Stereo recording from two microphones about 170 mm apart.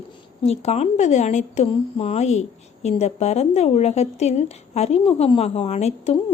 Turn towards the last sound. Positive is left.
turn(degrees=40)  # may be behind; listen again after turning